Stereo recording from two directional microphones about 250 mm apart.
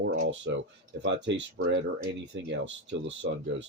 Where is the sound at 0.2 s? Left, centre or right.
Right.